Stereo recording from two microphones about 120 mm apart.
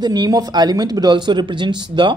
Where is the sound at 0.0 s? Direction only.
35° right (ahead or behind).